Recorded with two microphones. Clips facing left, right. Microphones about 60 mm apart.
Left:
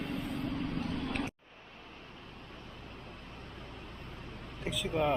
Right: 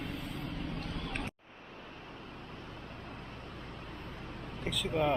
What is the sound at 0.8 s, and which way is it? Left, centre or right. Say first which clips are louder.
Vehicle: left 4 dB; centre.